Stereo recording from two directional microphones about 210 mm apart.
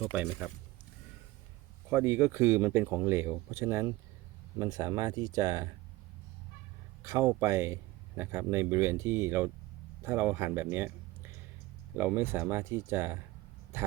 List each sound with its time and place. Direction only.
0.1 s speech: 5° right (ahead or behind)
1.9 s speech: 10° right (ahead or behind)
7.0 s speech: 15° right (ahead or behind)
11.9 s speech: 10° right (ahead or behind)